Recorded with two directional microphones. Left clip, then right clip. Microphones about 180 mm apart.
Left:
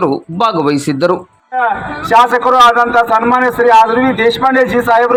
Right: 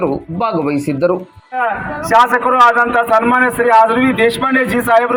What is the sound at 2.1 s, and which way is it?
A man's voice, 5° right (ahead or behind).